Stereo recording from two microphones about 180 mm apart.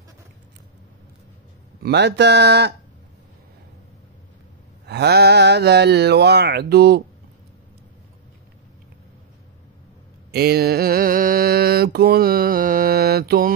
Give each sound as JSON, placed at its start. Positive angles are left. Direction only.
{"t": 1.8, "sound": "speech", "side_deg": -70}
{"t": 4.8, "sound": "mantra", "side_deg": -65}
{"t": 10.3, "sound": "mantra", "side_deg": -60}